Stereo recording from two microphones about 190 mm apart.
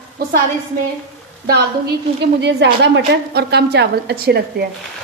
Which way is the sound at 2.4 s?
65° right (ahead or behind).